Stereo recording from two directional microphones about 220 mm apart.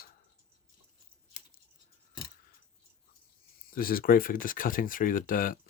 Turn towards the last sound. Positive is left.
turn(degrees=40)  # may be behind; listen again after turning